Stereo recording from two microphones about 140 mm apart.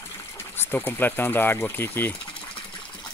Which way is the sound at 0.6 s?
15° left (ahead or behind).